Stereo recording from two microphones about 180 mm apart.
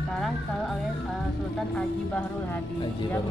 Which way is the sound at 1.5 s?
5° left (ahead or behind).